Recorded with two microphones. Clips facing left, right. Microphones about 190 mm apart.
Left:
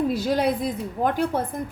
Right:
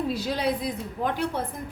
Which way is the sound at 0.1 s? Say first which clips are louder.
Left 4 dB; 50° left (ahead or behind).